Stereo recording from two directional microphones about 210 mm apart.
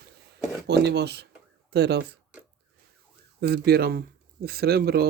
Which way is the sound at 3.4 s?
50° right (ahead or behind).